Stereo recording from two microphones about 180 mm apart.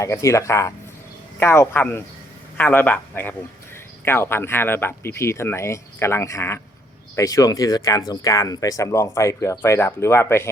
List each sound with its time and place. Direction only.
0.0 s speech: 15° left (ahead or behind)